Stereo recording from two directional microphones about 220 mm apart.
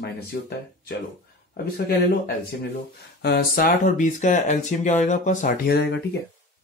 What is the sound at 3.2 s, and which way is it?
Speech, 45° left (ahead or behind).